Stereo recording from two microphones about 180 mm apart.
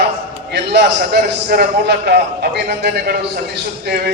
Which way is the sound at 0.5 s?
70° right (ahead or behind).